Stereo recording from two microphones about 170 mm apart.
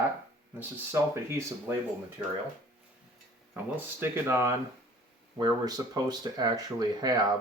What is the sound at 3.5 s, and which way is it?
Speech, 10° right (ahead or behind).